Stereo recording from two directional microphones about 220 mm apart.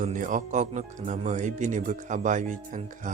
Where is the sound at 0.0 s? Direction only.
35° right (ahead or behind).